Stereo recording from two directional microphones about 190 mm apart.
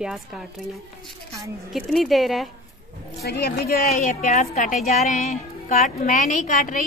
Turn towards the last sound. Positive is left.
turn(degrees=45)  # may be behind; listen again after turning